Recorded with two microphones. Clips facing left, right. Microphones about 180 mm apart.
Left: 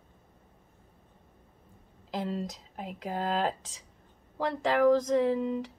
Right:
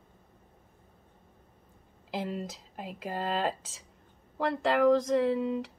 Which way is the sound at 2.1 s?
5° right (ahead or behind).